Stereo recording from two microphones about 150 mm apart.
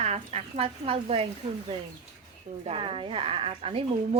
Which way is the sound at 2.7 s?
35° right (ahead or behind).